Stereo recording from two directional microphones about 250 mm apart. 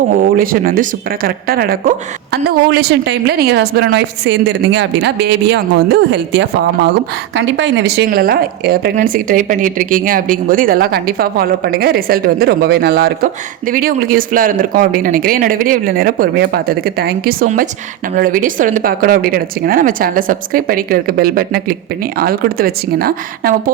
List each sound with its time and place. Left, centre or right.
0.2 s speech: right